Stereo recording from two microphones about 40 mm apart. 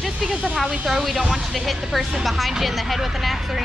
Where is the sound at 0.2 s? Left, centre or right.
Right.